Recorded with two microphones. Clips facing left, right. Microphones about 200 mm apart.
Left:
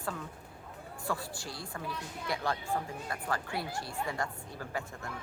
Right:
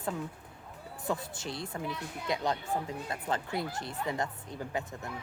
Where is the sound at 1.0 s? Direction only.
20° right (ahead or behind).